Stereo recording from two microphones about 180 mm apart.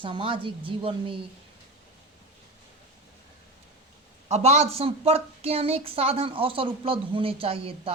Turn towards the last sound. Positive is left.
turn(degrees=-30)  # may be behind; listen again after turning